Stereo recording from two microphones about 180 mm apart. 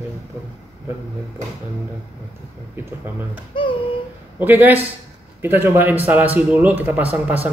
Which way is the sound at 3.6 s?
30° left (ahead or behind).